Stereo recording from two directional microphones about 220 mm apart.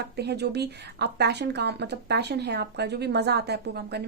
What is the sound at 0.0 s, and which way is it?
Speech, 50° right (ahead or behind).